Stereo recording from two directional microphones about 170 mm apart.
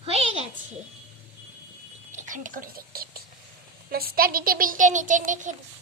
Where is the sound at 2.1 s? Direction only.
45° right (ahead or behind).